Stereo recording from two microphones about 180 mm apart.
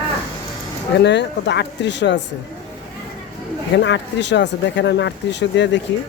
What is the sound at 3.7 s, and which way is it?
Speech, 75° left (ahead or behind).